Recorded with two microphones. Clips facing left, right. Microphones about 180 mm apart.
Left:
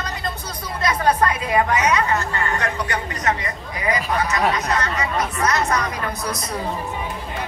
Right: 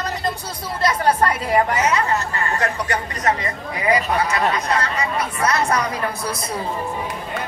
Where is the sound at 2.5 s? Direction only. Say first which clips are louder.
Right 2 dB; 35° right (ahead or behind).